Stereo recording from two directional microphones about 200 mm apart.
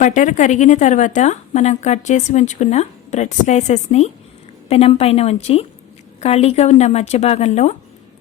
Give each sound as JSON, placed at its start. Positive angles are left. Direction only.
{"t": 0.0, "sound": "a woman's voice", "side_deg": 40}